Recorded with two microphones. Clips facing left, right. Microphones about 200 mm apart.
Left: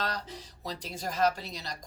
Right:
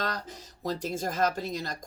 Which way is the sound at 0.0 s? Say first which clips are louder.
Right 1 dB; 50° right (ahead or behind).